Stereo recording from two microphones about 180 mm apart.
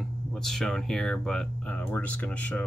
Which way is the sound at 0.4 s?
Centre (ahead or behind).